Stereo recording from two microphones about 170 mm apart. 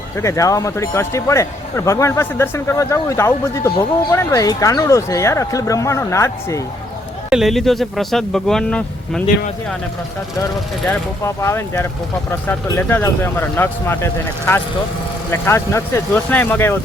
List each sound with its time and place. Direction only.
0.2 s speech: 20° left (ahead or behind)
7.3 s speech: centre (ahead or behind)
11.3 s speech: 15° left (ahead or behind)